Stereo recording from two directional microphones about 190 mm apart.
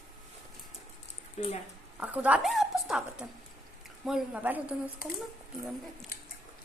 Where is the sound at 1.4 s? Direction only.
35° left (ahead or behind).